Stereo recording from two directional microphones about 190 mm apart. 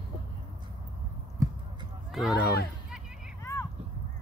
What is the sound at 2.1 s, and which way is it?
Run, centre (ahead or behind).